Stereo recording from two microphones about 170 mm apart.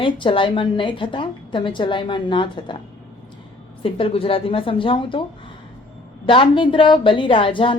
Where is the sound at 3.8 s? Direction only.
30° left (ahead or behind).